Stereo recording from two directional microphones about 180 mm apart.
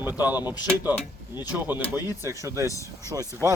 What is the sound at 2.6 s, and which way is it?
Speech, 15° left (ahead or behind).